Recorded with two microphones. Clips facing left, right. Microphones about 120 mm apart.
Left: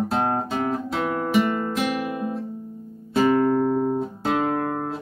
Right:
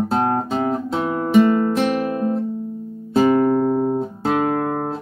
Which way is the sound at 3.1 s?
30° right (ahead or behind).